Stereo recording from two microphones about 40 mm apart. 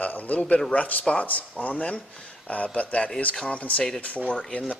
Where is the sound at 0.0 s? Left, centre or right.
Left.